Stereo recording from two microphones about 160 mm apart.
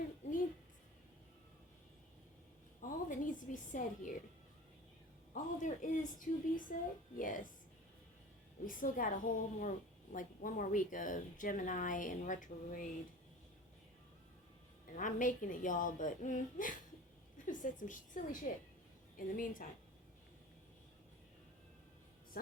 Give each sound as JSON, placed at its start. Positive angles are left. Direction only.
{"t": 2.8, "sound": "a woman's voice", "side_deg": 55}
{"t": 5.3, "sound": "a woman's voice", "side_deg": 50}
{"t": 8.6, "sound": "a woman's voice", "side_deg": 60}
{"t": 14.9, "sound": "a woman's voice", "side_deg": 55}